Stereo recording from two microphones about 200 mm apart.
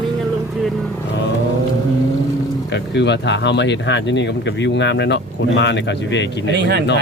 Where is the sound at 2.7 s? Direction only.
60° left (ahead or behind).